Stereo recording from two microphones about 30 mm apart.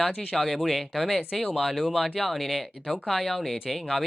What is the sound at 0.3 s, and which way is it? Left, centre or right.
Speech, centre.